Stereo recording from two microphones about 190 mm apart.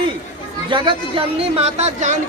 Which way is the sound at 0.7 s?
25° right (ahead or behind).